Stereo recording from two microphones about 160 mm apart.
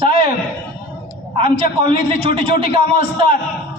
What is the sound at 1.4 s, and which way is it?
A man's voice, 35° right (ahead or behind).